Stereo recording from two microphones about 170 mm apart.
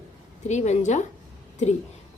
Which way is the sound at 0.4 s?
40° left (ahead or behind).